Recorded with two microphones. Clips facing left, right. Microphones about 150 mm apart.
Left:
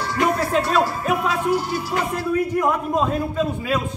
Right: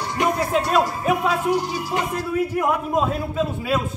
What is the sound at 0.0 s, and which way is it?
Music, 20° right (ahead or behind).